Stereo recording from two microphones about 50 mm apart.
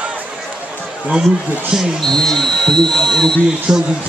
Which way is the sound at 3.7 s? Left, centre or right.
Centre.